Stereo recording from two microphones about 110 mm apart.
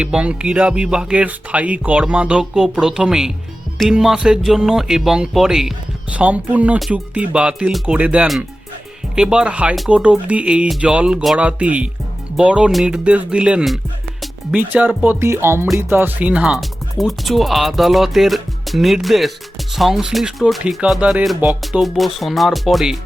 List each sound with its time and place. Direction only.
0.0 s speech: 10° right (ahead or behind)
21.2 s speech: centre (ahead or behind)